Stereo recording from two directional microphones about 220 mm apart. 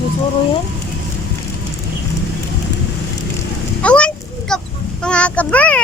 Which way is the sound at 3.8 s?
5° left (ahead or behind).